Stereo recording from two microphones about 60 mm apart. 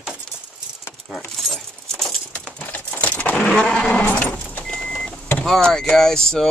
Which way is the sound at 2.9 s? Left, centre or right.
Left.